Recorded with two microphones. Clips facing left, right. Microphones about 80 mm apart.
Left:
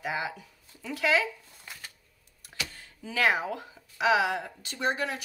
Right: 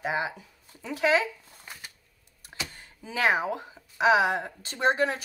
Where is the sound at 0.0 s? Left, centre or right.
Right.